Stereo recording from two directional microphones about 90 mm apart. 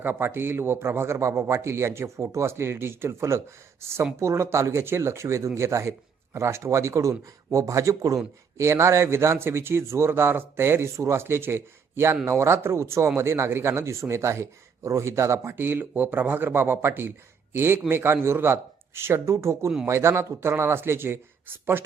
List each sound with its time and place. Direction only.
0.0 s a man's voice: 25° right (ahead or behind)